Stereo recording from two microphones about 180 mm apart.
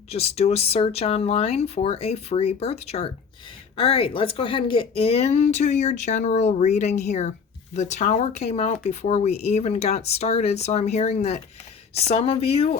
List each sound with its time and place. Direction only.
0.1 s speech: 35° left (ahead or behind)